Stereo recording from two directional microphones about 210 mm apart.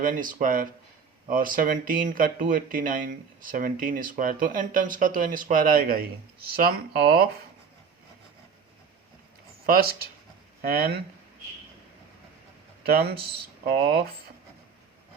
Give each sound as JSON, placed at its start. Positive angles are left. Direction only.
{"t": 0.0, "sound": "speech", "side_deg": -40}
{"t": 9.6, "sound": "speech", "side_deg": -45}
{"t": 12.8, "sound": "speech", "side_deg": -45}